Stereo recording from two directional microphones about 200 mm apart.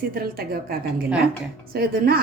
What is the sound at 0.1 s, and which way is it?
A woman's voice, 50° right (ahead or behind).